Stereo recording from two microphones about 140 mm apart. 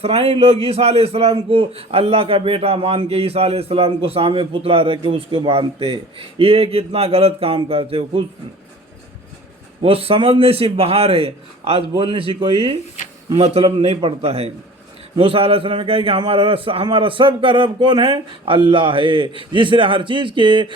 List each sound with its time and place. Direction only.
0.0 s a man's voice: 45° right (ahead or behind)
9.8 s a man's voice: 40° right (ahead or behind)